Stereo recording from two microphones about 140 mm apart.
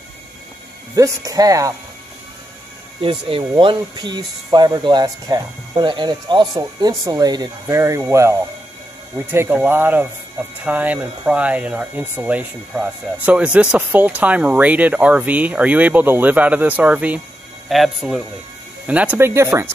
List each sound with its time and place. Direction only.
0.9 s speech: 25° right (ahead or behind)
3.0 s speech: 40° right (ahead or behind); by 19.7 s 20° right (ahead or behind)